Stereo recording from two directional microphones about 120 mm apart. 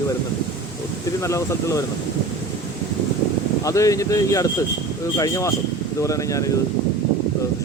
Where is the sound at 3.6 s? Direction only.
25° left (ahead or behind).